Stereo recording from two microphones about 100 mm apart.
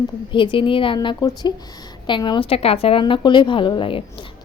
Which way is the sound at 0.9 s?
45° left (ahead or behind).